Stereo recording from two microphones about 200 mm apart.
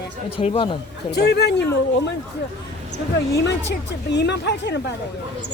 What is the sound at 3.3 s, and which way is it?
A woman's voice, 60° left (ahead or behind).